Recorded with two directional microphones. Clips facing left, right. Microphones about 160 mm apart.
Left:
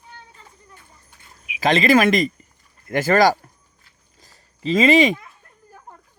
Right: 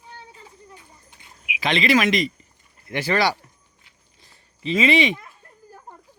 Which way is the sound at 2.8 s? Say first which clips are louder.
Left 6 dB; 45° left (ahead or behind).